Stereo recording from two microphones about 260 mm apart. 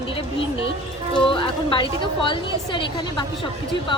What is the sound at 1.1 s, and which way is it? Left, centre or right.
A woman's voice, centre.